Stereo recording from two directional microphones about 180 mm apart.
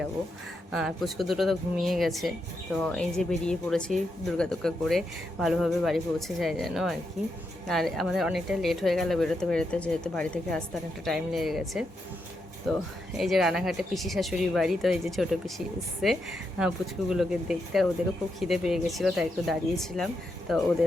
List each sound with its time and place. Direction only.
0.7 s speech: centre (ahead or behind)